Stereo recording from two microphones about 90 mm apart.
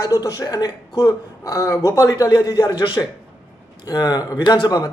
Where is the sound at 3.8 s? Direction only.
45° left (ahead or behind).